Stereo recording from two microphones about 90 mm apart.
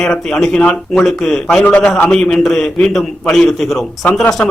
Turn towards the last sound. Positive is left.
turn(degrees=5)  # may be behind; listen again after turning